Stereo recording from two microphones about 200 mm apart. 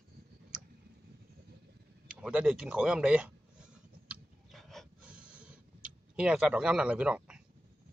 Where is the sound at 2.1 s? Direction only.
5° right (ahead or behind).